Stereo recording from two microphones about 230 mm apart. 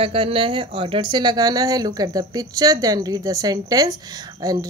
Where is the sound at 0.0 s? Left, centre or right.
Right.